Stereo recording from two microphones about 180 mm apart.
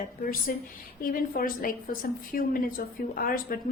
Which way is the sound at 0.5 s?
55° left (ahead or behind).